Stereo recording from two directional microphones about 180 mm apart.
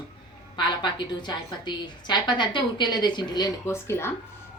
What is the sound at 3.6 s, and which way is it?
Speech, 15° left (ahead or behind).